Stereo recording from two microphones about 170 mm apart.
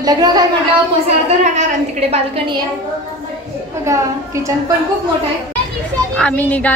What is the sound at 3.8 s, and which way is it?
Speech, 15° right (ahead or behind).